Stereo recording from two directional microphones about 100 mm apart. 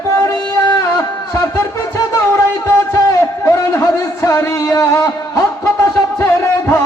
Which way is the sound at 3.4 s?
30° left (ahead or behind).